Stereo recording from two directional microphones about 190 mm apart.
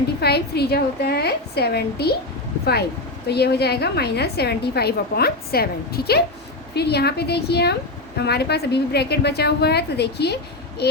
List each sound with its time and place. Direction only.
0.2 s a woman's voice: 60° left (ahead or behind)
3.2 s a woman's voice: 60° left (ahead or behind)